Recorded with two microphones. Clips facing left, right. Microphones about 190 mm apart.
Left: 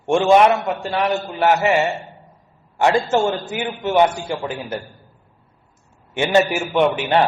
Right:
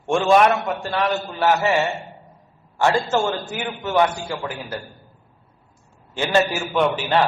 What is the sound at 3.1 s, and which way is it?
A man's voice, 20° left (ahead or behind).